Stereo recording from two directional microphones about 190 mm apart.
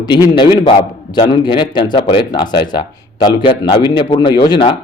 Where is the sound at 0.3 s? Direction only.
25° left (ahead or behind).